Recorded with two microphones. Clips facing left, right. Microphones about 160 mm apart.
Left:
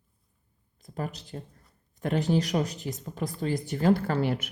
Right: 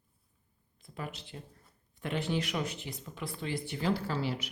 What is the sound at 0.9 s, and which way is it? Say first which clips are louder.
Speech: left 7 dB; 40° left (ahead or behind).